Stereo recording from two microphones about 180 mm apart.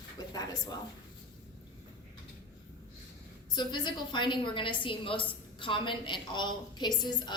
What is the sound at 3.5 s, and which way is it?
A woman's voice, 25° left (ahead or behind).